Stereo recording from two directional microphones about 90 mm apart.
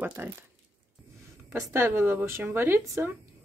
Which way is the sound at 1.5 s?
30° right (ahead or behind).